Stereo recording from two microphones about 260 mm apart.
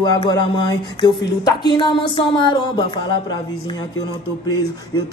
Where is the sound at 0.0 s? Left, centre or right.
Centre.